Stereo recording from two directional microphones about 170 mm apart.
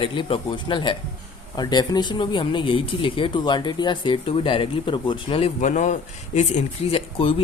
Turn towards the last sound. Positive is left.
turn(degrees=35)  # may be behind; listen again after turning